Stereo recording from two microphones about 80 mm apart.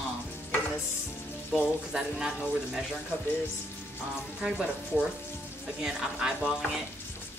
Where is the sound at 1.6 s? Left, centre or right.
Centre.